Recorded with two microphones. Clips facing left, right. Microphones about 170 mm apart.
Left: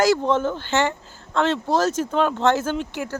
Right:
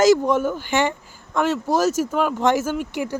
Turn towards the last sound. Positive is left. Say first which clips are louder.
# right 1 dB
turn(degrees=-15)  # may be behind; listen again after turning